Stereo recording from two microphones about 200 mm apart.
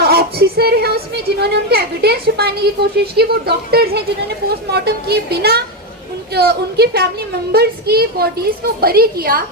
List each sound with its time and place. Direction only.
0.0 s speech: 50° right (ahead or behind)